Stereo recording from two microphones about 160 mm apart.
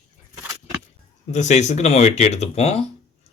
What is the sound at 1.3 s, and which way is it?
Speech, 45° left (ahead or behind).